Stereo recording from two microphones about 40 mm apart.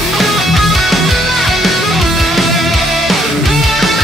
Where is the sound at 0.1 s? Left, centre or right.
Centre.